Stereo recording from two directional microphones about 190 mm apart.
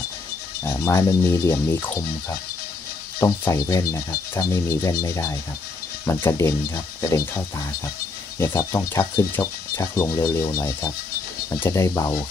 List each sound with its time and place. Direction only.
0.7 s speech: 15° left (ahead or behind)